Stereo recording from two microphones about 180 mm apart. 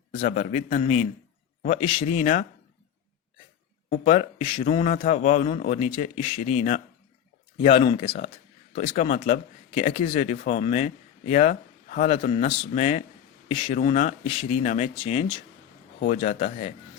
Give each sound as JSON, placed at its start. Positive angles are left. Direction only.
{"t": 0.2, "sound": "speech", "side_deg": 45}
{"t": 3.8, "sound": "speech", "side_deg": 45}
{"t": 13.5, "sound": "speech", "side_deg": 30}
{"t": 13.7, "sound": "speech", "side_deg": 40}